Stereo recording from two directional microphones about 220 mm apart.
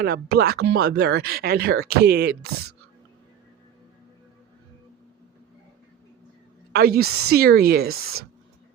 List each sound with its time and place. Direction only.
0.0 s speech: 45° right (ahead or behind)
6.7 s speech: 45° right (ahead or behind)